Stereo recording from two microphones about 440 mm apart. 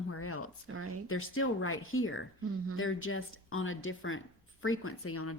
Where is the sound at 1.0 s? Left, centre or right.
Left.